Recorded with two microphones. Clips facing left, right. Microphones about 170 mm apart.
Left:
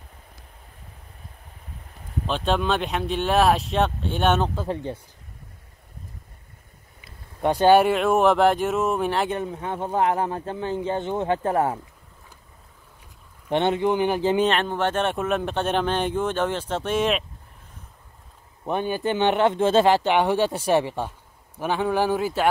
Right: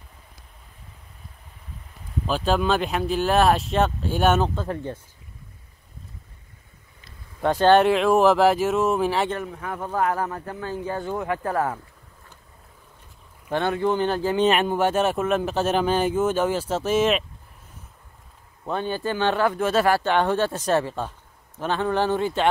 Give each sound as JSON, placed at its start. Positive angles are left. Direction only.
{"t": 2.2, "sound": "speech", "side_deg": -5}
{"t": 4.6, "sound": "speech", "side_deg": 20}
{"t": 7.4, "sound": "speech", "side_deg": 15}
{"t": 9.5, "sound": "speech", "side_deg": 25}
{"t": 13.5, "sound": "speech", "side_deg": 20}
{"t": 14.4, "sound": "speech", "side_deg": -10}
{"t": 18.7, "sound": "speech", "side_deg": 15}